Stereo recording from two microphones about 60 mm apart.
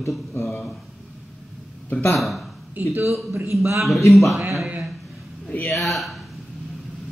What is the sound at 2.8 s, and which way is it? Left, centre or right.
Speech, right.